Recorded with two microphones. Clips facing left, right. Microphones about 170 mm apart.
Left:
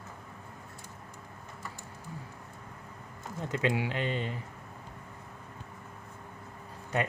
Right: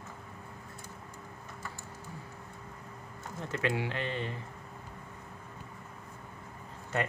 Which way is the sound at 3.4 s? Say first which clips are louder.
Left 2 dB; 15° left (ahead or behind).